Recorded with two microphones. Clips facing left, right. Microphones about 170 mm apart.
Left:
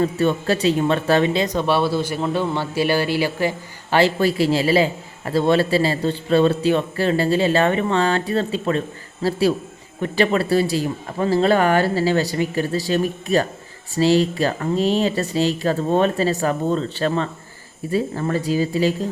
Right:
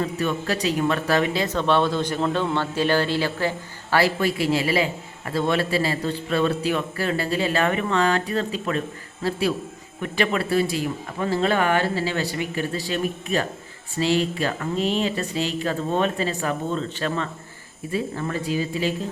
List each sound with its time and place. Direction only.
0.0 s speech: 30° left (ahead or behind)